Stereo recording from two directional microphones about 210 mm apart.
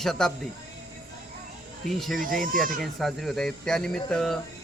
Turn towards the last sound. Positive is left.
turn(degrees=0)  # may be behind; listen again after turning